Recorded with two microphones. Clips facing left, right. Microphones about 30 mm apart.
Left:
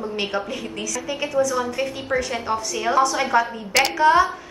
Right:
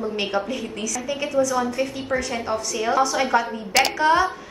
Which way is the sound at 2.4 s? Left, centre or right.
Centre.